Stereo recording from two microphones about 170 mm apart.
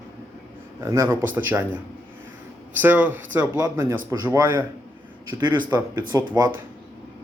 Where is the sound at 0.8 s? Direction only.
15° right (ahead or behind).